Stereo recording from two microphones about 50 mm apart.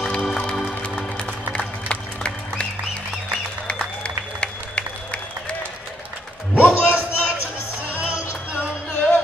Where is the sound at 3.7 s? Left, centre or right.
Left.